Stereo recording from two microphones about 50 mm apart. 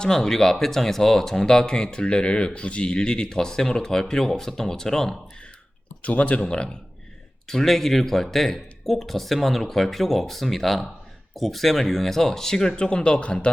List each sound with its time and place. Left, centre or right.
0.0 s speech: centre
6.0 s speech: left
7.4 s speech: centre; by 13.5 s left